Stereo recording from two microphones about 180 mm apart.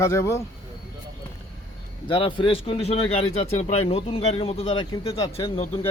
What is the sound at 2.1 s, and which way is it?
Speech, 30° left (ahead or behind).